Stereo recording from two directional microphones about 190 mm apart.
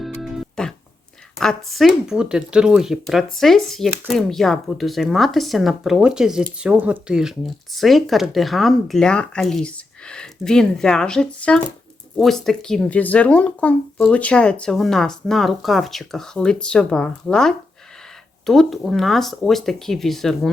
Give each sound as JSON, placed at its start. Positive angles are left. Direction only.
{"t": 0.2, "sound": "music", "side_deg": 0}
{"t": 1.4, "sound": "speech", "side_deg": 0}